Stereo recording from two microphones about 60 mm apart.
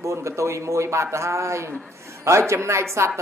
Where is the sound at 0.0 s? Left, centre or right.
Right.